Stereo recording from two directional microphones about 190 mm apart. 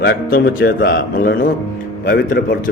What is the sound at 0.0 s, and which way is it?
A man's voice, 55° left (ahead or behind).